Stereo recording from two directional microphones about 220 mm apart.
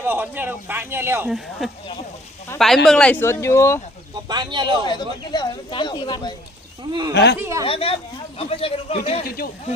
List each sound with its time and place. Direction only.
0.0 s speech: 10° right (ahead or behind); by 3.8 s 10° left (ahead or behind)
4.3 s speech: 20° right (ahead or behind)
4.9 s speech: 20° left (ahead or behind)
7.1 s speech: 50° left (ahead or behind)
7.3 s speech: 10° right (ahead or behind)
7.6 s speech: 25° left (ahead or behind)